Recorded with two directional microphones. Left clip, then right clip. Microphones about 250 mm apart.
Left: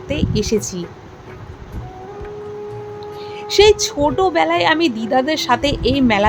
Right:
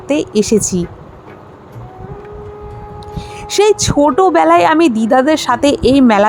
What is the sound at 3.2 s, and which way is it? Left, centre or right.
A woman's voice, right.